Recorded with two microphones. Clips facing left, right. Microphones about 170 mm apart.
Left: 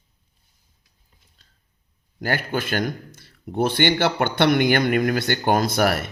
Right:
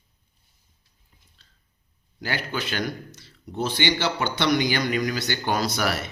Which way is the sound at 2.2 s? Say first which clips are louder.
Left 5 dB; 50° left (ahead or behind).